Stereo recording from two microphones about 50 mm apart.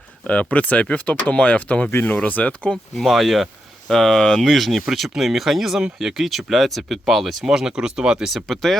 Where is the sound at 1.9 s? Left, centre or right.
Left.